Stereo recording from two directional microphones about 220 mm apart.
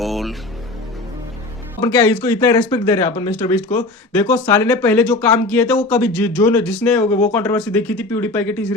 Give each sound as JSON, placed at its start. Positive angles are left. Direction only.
{"t": 0.0, "sound": "music", "side_deg": 0}
{"t": 1.8, "sound": "speech", "side_deg": 15}